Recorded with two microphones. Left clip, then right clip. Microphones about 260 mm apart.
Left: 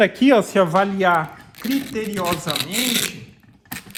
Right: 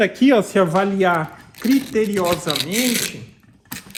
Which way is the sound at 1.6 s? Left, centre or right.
Centre.